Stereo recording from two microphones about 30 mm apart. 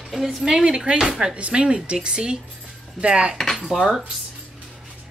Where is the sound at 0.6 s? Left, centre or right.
Right.